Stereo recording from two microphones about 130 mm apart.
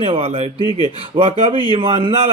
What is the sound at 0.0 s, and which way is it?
A man's voice, 50° right (ahead or behind).